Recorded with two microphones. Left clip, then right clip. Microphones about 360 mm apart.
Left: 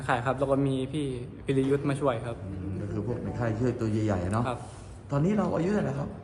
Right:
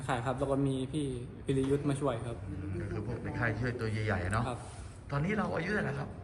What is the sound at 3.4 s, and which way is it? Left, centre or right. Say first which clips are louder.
Speech: left 4 dB; centre.